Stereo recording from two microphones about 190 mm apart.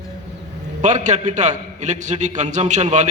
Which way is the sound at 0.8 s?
40° right (ahead or behind).